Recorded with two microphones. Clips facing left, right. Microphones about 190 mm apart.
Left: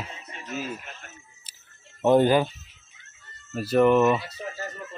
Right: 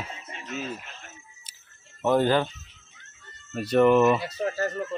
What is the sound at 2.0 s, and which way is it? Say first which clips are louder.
Speech: left 3 dB; 20° left (ahead or behind).